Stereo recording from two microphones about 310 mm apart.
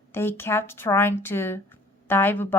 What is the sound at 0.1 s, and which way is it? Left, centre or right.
Speech, centre.